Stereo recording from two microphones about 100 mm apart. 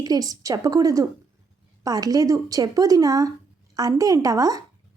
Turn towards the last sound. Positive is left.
turn(degrees=-35)  # may be behind; listen again after turning